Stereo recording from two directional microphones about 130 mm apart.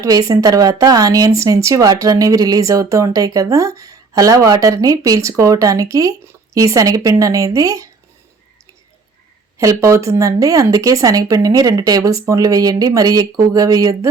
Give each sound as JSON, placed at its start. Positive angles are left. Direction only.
{"t": 0.0, "sound": "speech", "side_deg": -25}
{"t": 9.6, "sound": "speech", "side_deg": -25}